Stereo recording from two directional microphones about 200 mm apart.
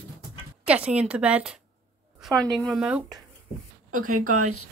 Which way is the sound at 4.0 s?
40° right (ahead or behind).